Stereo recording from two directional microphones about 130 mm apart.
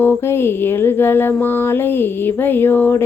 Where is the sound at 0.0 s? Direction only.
15° left (ahead or behind).